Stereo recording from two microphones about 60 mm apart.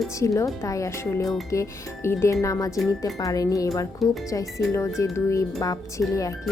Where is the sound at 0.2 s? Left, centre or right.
Left.